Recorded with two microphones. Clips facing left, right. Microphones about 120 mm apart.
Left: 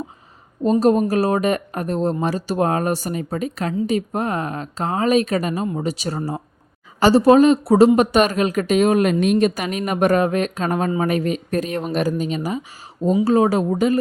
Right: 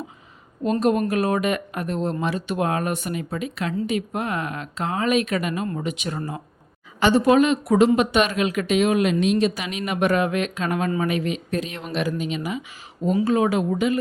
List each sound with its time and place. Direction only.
0.6 s speech: 35° left (ahead or behind)